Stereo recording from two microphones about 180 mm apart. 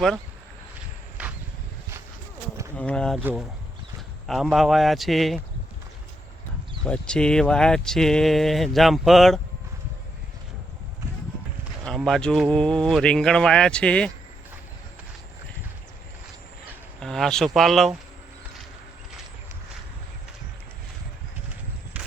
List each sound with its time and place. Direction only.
1.2 s vehicle: 5° right (ahead or behind)
2.7 s speech: 5° left (ahead or behind)
4.5 s speech: centre (ahead or behind)
6.8 s speech: 5° left (ahead or behind)
11.9 s speech: centre (ahead or behind)
17.0 s speech: 5° left (ahead or behind)
22.0 s vehicle: 5° right (ahead or behind)